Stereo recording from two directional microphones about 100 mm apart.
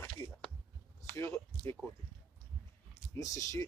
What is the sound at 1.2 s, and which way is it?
Speech, 25° left (ahead or behind).